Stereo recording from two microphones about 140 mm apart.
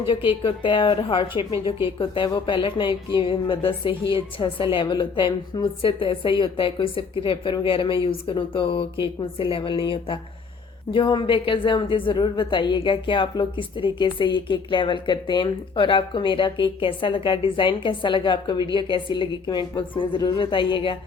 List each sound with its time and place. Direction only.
0.1 s a woman's voice: 35° left (ahead or behind)